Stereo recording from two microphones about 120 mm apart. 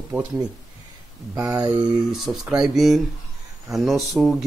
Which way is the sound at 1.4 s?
30° right (ahead or behind).